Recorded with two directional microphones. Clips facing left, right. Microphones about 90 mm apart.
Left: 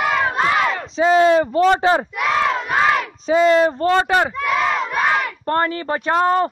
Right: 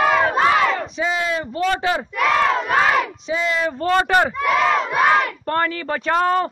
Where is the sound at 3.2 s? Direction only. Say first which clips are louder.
Left 8 dB; 45° left (ahead or behind).